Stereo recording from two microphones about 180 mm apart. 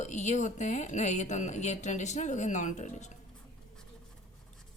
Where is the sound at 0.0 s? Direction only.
40° left (ahead or behind).